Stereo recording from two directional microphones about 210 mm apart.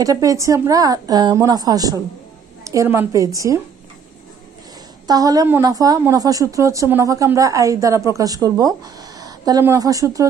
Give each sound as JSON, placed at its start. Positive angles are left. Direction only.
{"t": 0.0, "sound": "a woman's voice", "side_deg": -15}
{"t": 5.0, "sound": "a woman's voice", "side_deg": -20}